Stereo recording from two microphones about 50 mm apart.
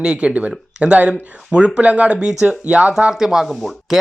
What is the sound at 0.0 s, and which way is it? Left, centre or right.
Speech, centre.